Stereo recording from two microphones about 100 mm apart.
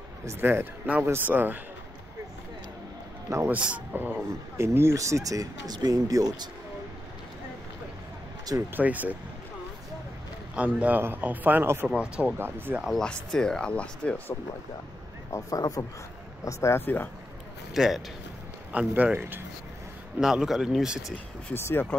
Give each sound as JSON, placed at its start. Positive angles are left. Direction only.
{"t": 0.4, "sound": "a man's voice", "side_deg": -20}
{"t": 3.4, "sound": "speech", "side_deg": -15}
{"t": 8.7, "sound": "speech", "side_deg": -15}
{"t": 10.5, "sound": "speech", "side_deg": -15}
{"t": 11.9, "sound": "speech", "side_deg": -10}
{"t": 12.4, "sound": "a man's voice", "side_deg": -20}
{"t": 12.8, "sound": "speech", "side_deg": 5}
{"t": 15.3, "sound": "speech", "side_deg": 35}
{"t": 17.7, "sound": "a man's voice", "side_deg": -5}
{"t": 20.2, "sound": "speech", "side_deg": -5}
{"t": 21.5, "sound": "speech", "side_deg": 20}